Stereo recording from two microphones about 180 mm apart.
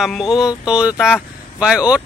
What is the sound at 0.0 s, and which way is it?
A man's voice, centre (ahead or behind).